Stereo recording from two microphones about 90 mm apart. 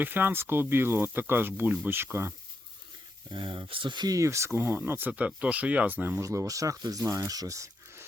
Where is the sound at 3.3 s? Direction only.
60° right (ahead or behind).